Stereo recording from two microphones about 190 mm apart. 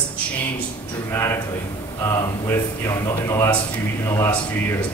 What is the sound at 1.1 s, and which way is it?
Speech, 15° left (ahead or behind).